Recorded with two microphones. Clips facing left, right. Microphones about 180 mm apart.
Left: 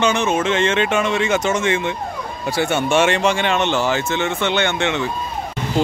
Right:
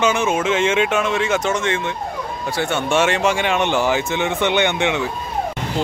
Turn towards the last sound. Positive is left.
turn(degrees=-15)  # may be behind; listen again after turning